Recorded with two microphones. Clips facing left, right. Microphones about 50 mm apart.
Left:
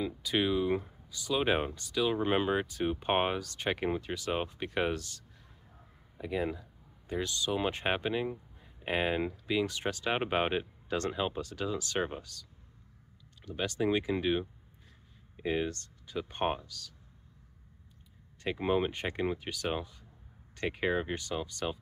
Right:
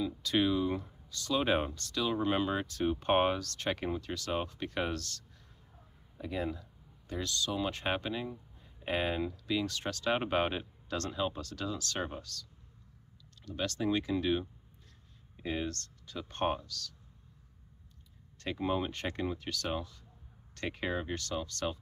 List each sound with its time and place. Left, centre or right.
0.2 s speech: centre
13.5 s speech: centre
18.6 s speech: left